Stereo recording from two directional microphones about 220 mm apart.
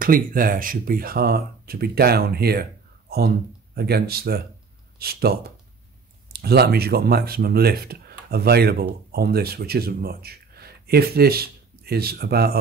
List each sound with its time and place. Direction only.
0.0 s speech: 40° right (ahead or behind)